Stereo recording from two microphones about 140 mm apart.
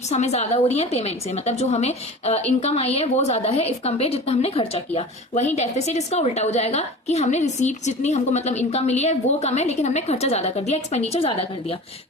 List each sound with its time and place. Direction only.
0.1 s a woman's voice: 50° left (ahead or behind)